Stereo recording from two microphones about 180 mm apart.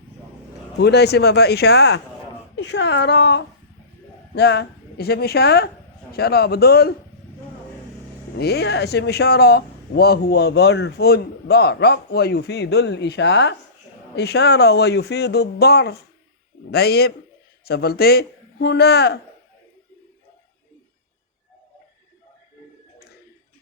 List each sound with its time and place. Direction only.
0.8 s speech: 70° left (ahead or behind)
8.4 s speech: 65° left (ahead or behind)